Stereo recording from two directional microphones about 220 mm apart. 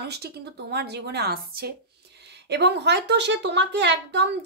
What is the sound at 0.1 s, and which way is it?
A woman's voice, 50° right (ahead or behind).